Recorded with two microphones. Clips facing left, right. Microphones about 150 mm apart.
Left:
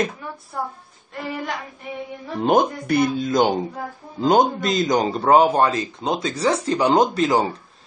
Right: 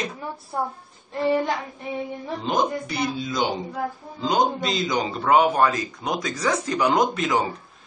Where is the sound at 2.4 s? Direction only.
55° left (ahead or behind); by 7.4 s 35° left (ahead or behind).